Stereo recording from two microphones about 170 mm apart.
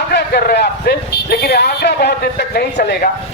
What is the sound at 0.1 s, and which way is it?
Speech, 70° left (ahead or behind).